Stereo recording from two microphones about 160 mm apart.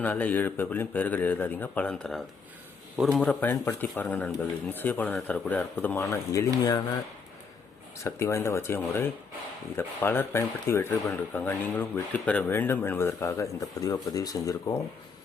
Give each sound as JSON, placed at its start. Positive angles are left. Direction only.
{"t": 0.0, "sound": "speech", "side_deg": 10}
{"t": 8.0, "sound": "speech", "side_deg": 20}